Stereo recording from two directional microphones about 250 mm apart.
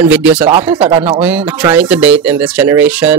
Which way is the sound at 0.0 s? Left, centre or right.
Centre.